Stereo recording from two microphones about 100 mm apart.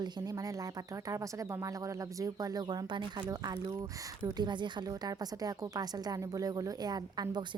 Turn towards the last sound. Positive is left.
turn(degrees=-45)  # may be behind; listen again after turning